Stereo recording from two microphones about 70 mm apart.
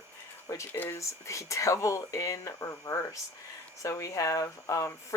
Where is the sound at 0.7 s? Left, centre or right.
Left.